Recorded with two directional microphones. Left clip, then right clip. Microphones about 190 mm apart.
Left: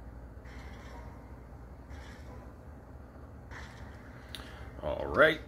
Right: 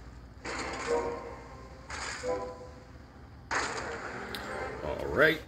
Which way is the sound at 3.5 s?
5° left (ahead or behind).